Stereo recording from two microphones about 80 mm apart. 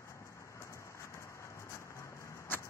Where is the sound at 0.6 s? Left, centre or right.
Left.